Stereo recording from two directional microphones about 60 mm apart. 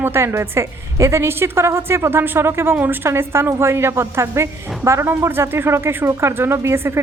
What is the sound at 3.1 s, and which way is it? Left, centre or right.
A woman's voice, right.